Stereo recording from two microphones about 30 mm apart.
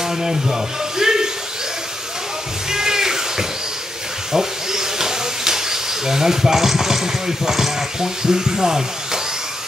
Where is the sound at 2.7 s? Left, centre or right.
Centre.